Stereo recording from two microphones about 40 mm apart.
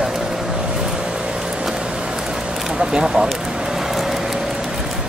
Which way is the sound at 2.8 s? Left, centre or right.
Right.